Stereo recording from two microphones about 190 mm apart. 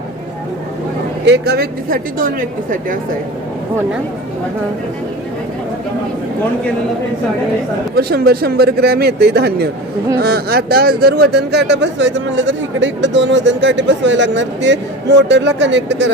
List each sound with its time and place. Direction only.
1.3 s a woman's voice: 55° right (ahead or behind)
7.9 s speech: 55° right (ahead or behind)